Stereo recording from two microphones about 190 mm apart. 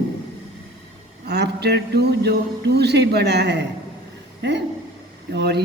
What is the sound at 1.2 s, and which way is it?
A woman's voice, 60° right (ahead or behind).